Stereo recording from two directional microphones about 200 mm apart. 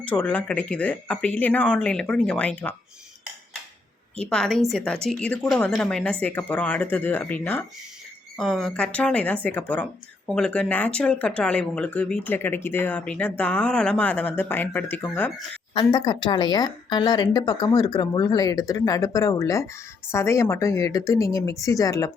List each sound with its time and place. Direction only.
0.1 s speech: 5° left (ahead or behind)
4.2 s speech: 5° left (ahead or behind)
15.7 s speech: 25° left (ahead or behind)